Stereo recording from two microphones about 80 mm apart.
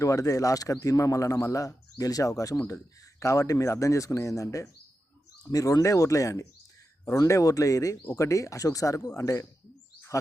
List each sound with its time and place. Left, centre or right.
0.0 s speech: left
2.6 s speech: left